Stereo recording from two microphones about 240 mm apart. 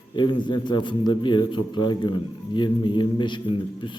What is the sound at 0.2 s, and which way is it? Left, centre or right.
A man's voice, centre.